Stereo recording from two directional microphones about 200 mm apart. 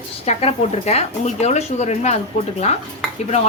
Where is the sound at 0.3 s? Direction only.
35° left (ahead or behind).